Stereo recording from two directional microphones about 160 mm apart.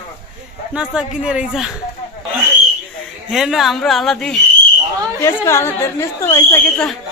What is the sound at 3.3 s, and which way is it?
A woman's voice, centre (ahead or behind).